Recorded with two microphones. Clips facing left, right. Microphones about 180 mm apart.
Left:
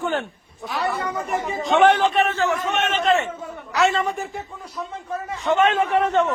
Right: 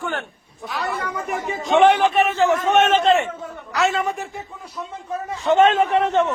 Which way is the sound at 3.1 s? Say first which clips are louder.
Left 1 dB; 25° right (ahead or behind).